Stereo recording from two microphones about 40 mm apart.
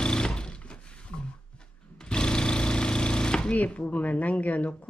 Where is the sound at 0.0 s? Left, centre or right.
Centre.